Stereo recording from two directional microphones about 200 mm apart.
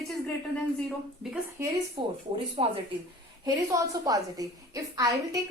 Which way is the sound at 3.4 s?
15° right (ahead or behind).